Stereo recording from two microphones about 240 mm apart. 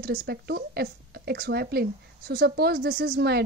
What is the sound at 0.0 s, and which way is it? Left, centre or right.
A woman's voice, right.